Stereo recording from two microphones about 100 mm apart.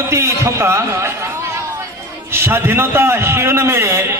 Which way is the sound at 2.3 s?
25° right (ahead or behind).